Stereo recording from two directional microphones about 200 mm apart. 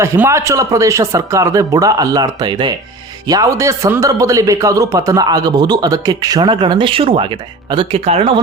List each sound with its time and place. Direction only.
0.0 s a man's voice: 15° right (ahead or behind); by 8.4 s 30° right (ahead or behind)